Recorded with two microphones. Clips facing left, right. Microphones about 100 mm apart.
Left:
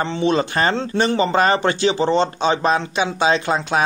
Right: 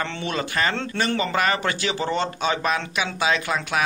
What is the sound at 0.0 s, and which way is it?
Speech, 25° left (ahead or behind).